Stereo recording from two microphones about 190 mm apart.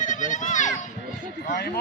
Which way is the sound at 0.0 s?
40° left (ahead or behind).